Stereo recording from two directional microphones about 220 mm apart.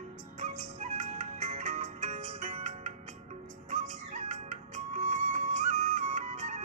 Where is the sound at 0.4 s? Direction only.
30° right (ahead or behind).